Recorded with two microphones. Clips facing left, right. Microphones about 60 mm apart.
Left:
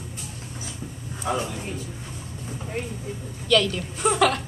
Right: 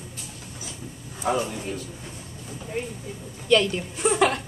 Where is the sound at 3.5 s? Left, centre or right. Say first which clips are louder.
Right 1 dB; right.